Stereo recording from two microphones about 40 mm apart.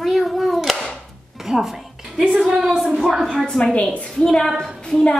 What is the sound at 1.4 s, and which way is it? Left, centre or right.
Music, centre.